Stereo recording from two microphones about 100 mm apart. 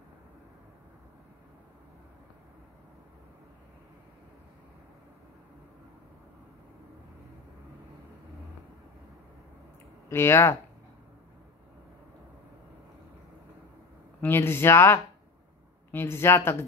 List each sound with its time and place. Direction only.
10.0 s speech: 25° left (ahead or behind)
14.2 s speech: 25° left (ahead or behind)